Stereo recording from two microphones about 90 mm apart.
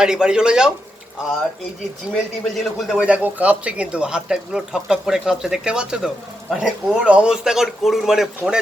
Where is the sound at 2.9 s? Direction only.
15° right (ahead or behind).